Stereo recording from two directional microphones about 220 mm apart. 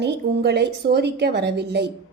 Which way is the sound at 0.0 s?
50° right (ahead or behind).